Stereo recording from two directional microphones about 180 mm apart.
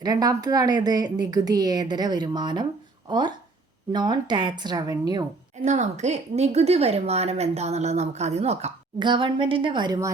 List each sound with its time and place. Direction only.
0.0 s a woman's voice: 20° right (ahead or behind)
5.6 s a woman's voice: 40° right (ahead or behind)
9.0 s a woman's voice: 25° right (ahead or behind)